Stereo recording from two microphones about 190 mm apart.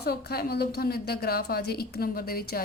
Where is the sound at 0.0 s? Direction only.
55° left (ahead or behind).